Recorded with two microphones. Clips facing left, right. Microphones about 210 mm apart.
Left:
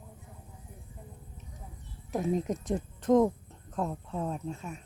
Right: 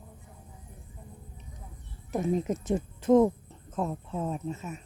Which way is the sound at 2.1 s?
Centre (ahead or behind).